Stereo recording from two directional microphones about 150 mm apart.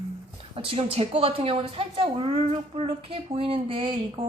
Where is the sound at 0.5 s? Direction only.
40° right (ahead or behind).